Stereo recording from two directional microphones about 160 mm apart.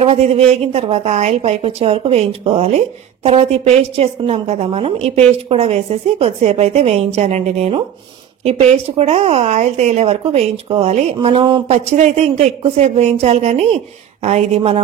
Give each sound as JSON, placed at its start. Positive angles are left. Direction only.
{"t": 0.0, "sound": "a woman's voice", "side_deg": -45}
{"t": 11.1, "sound": "a woman's voice", "side_deg": -30}